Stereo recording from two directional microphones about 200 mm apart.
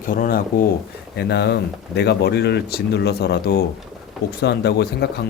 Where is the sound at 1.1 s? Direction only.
55° left (ahead or behind).